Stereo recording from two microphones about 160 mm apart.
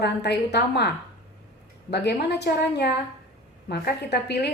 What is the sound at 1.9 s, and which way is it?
A woman's voice, 90° left.